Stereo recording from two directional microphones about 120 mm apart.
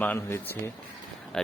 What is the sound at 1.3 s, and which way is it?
Speech, 5° left (ahead or behind).